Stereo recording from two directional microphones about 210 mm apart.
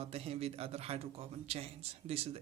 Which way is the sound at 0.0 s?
30° right (ahead or behind).